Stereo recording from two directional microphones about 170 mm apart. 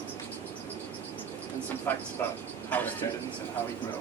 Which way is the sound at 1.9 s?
10° left (ahead or behind).